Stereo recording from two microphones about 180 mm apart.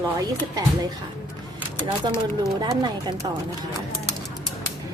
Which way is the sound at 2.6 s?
25° right (ahead or behind).